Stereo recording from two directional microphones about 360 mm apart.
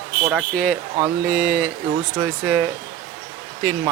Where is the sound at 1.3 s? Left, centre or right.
Right.